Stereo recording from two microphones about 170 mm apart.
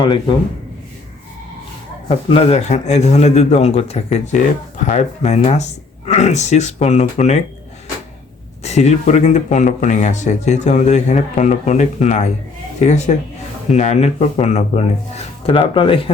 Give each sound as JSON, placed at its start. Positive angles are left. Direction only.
{"t": 2.0, "sound": "speech", "side_deg": 40}
{"t": 8.6, "sound": "speech", "side_deg": 40}